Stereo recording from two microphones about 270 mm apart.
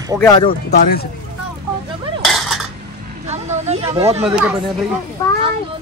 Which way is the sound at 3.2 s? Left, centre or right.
Right.